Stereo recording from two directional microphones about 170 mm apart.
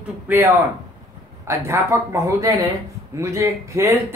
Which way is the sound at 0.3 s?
10° right (ahead or behind).